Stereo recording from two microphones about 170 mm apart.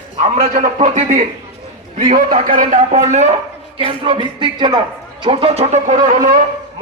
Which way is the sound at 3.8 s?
30° right (ahead or behind).